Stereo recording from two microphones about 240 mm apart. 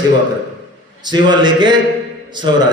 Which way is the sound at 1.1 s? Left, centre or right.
Centre.